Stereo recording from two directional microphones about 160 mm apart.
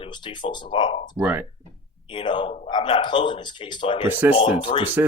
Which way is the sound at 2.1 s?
30° left (ahead or behind).